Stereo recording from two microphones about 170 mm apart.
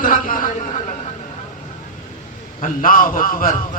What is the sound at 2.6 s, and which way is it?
Speech, 55° left (ahead or behind).